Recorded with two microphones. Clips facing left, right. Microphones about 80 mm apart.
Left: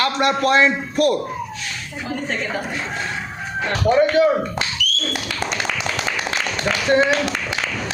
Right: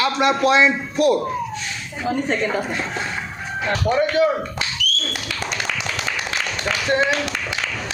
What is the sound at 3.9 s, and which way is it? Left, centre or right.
Speech, left.